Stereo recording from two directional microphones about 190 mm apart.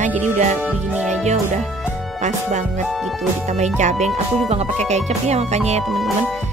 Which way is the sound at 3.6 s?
40° right (ahead or behind).